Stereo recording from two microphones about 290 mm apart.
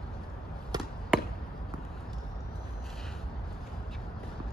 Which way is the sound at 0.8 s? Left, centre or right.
Centre.